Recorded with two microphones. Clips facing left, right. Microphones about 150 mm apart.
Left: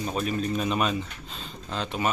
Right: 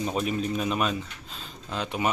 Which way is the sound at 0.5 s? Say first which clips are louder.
Left 1 dB; 5° right (ahead or behind).